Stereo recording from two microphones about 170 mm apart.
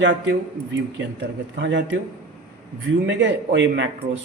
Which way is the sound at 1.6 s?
90° right.